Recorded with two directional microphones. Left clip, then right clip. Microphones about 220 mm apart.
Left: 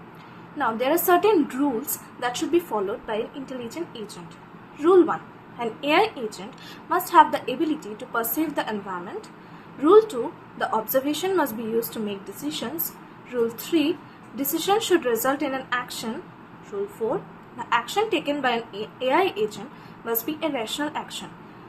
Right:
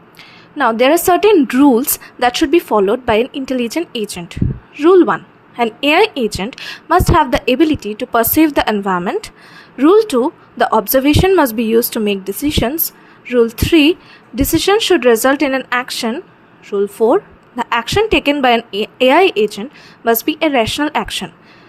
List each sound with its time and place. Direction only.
0.6 s a woman's voice: 45° right (ahead or behind)